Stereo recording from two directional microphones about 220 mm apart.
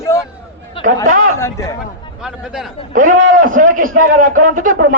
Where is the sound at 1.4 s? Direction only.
15° left (ahead or behind).